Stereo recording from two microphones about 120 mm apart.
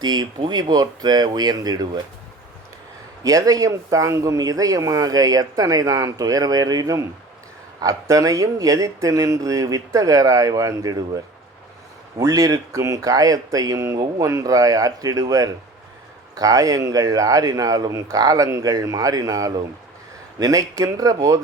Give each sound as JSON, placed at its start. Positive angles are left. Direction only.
{"t": 0.0, "sound": "speech", "side_deg": -35}
{"t": 3.2, "sound": "speech", "side_deg": -30}
{"t": 12.2, "sound": "speech", "side_deg": -30}